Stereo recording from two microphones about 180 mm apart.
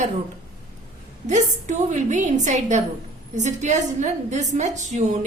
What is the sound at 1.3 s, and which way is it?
A woman's voice, 40° right (ahead or behind).